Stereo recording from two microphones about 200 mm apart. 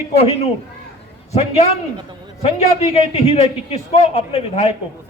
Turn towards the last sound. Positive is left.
turn(degrees=30)  # may be behind; listen again after turning